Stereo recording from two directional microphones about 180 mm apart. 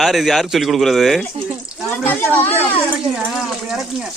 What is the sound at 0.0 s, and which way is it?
Speech, centre (ahead or behind).